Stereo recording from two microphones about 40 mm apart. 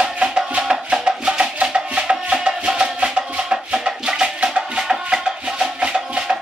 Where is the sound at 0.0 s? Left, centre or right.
Right.